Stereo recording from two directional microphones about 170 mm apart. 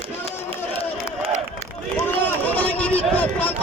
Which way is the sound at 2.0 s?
10° left (ahead or behind).